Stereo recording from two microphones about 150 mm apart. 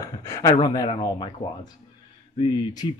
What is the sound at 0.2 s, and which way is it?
Speech, 20° left (ahead or behind).